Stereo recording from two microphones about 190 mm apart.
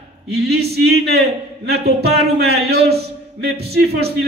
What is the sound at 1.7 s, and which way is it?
Speech, 60° right (ahead or behind).